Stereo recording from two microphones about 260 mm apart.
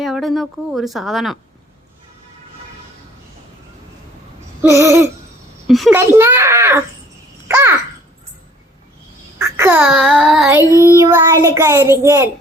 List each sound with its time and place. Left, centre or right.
0.0 s a woman's voice: centre
4.7 s child singing: centre
5.6 s a woman's voice: centre
6.0 s child singing: centre
7.4 s babbling: centre
9.4 s a woman's voice: centre
10.8 s child singing: centre